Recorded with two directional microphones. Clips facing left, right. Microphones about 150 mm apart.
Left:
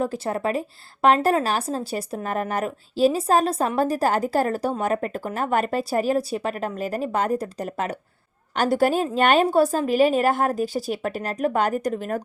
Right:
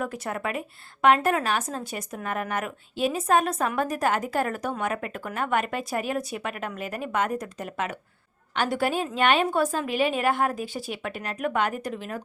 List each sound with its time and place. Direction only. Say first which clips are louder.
0.0 s a woman's voice: left 6 dB; 30° left (ahead or behind)